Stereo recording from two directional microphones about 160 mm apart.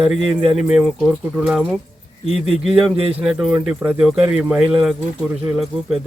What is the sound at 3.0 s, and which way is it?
Speech, 40° right (ahead or behind).